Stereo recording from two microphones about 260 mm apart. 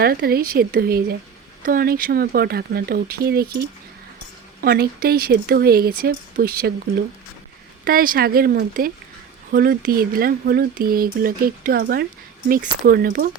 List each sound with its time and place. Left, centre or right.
0.0 s speech: right
4.6 s speech: right
7.9 s speech: right